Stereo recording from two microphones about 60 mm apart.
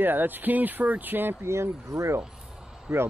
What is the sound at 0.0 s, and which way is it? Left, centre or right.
Speech, right.